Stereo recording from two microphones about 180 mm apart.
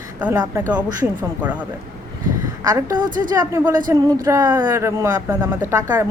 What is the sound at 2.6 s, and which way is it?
A woman's voice, 20° right (ahead or behind).